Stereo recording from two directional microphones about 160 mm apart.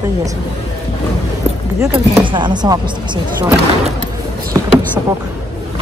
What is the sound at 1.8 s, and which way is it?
Speech, 20° right (ahead or behind).